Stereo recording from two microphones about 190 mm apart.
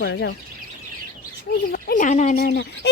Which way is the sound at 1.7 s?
45° left (ahead or behind).